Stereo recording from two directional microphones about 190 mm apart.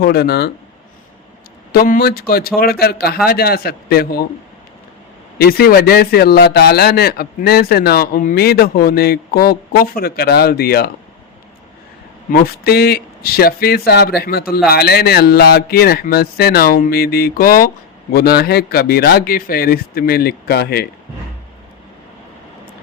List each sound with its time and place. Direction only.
0.0 s a man's voice: 55° left (ahead or behind)
1.7 s a man's voice: 50° left (ahead or behind)
5.4 s a man's voice: 55° left (ahead or behind)
12.3 s a man's voice: 55° left (ahead or behind)